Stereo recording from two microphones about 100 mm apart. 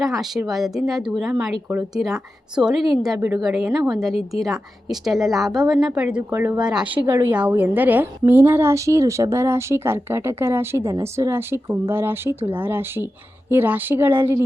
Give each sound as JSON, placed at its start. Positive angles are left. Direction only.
{"t": 0.0, "sound": "a woman's voice", "side_deg": 0}
{"t": 6.3, "sound": "a woman's voice", "side_deg": -25}
{"t": 6.6, "sound": "a woman's voice", "side_deg": -10}